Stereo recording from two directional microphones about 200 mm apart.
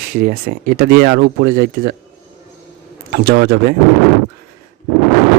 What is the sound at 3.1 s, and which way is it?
Speech, 55° right (ahead or behind).